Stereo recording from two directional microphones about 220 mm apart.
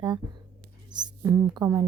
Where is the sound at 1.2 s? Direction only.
10° right (ahead or behind).